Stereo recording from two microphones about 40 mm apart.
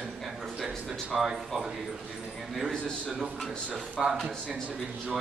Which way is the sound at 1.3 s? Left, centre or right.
Centre.